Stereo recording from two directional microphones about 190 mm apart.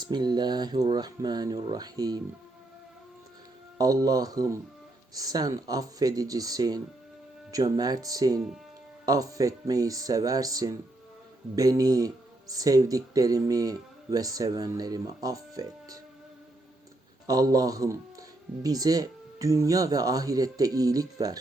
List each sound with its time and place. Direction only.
0.0 s speech: 20° right (ahead or behind)
3.8 s speech: 20° right (ahead or behind)
17.2 s speech: 20° right (ahead or behind)